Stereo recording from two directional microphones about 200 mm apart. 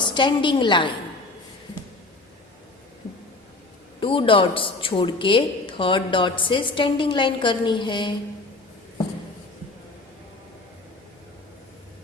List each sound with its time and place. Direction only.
0.0 s a woman's voice: 25° left (ahead or behind)
4.0 s a woman's voice: 25° left (ahead or behind)